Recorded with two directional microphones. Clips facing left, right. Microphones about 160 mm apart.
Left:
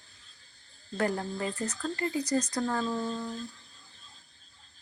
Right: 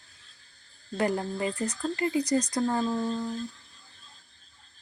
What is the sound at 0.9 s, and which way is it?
Speech, 15° right (ahead or behind).